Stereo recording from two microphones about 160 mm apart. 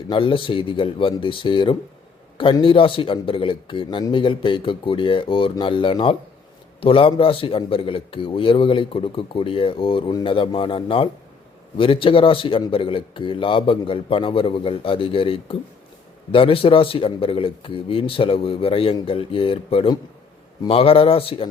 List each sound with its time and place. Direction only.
0.1 s a man's voice: 30° left (ahead or behind)